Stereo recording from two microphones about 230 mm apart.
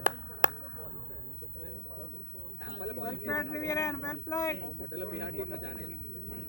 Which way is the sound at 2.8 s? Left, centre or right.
Right.